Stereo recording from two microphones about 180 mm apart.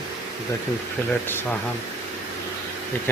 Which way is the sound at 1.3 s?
10° left (ahead or behind).